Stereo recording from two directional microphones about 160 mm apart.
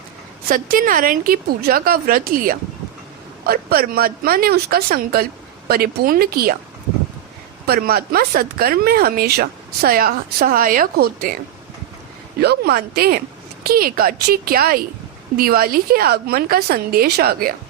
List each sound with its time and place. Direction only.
0.4 s speech: 65° right (ahead or behind)
7.7 s speech: 70° right (ahead or behind)
12.4 s speech: 90° right